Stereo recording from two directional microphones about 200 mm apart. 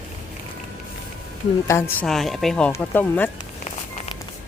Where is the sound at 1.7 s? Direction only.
15° left (ahead or behind).